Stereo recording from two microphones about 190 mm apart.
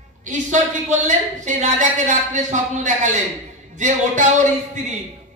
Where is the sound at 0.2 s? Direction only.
40° right (ahead or behind).